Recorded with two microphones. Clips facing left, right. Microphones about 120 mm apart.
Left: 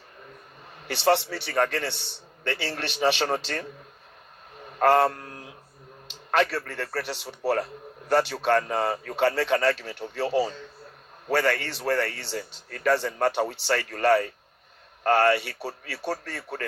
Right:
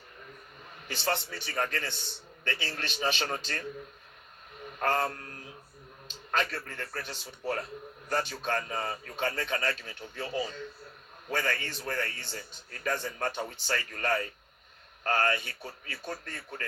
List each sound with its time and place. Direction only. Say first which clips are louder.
0.9 s speech: left 10 dB; 75° left (ahead or behind)
4.8 s speech: left 9 dB; 75° left (ahead or behind)
6.3 s speech: left 8 dB; 75° left (ahead or behind)